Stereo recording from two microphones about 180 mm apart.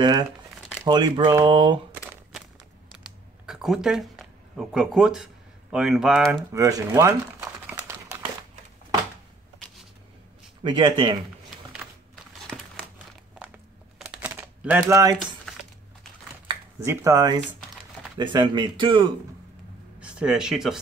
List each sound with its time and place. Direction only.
0.8 s speech: 25° right (ahead or behind)
2.9 s computer keyboard: 5° right (ahead or behind)
6.5 s crumpling: 15° right (ahead or behind)
10.6 s speech: 25° right (ahead or behind)
11.5 s typewriter: 5° right (ahead or behind)
13.9 s crumpling: 5° right (ahead or behind)
16.8 s speech: 15° right (ahead or behind)
20.0 s speech: 5° right (ahead or behind)